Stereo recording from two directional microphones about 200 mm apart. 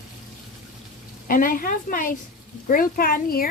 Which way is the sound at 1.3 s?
45° left (ahead or behind).